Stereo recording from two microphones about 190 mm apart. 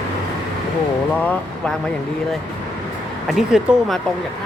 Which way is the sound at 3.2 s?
Centre (ahead or behind).